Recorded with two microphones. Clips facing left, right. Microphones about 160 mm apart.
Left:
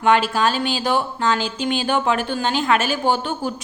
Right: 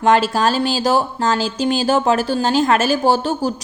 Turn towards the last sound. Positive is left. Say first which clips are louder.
# right 4 dB
turn(degrees=-40)  # may be behind; listen again after turning